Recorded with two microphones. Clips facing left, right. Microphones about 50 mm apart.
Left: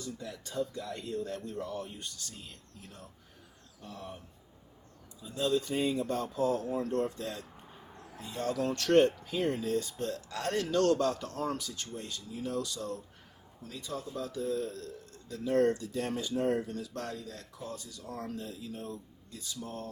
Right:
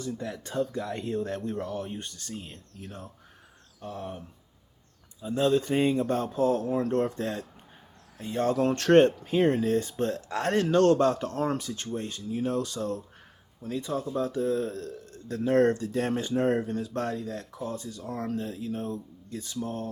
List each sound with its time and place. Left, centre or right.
0.0 s speech: right
5.2 s speech: right